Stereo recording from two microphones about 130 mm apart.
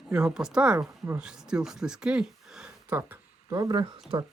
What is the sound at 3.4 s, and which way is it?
Speech, 30° right (ahead or behind).